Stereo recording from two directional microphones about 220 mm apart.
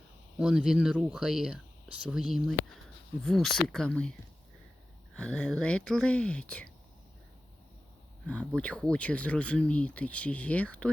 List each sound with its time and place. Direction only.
0.3 s speech: 5° right (ahead or behind)
5.1 s speech: 5° left (ahead or behind)
8.3 s speech: 5° left (ahead or behind)